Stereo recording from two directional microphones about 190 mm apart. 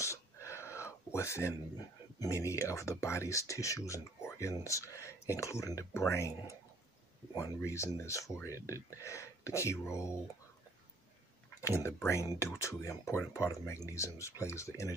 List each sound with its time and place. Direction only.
0.0 s a sound: 15° left (ahead or behind)
2.1 s speech: 15° left (ahead or behind)
11.6 s speech: 15° left (ahead or behind)